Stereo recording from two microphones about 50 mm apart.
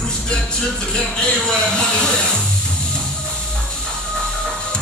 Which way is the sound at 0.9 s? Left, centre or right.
Centre.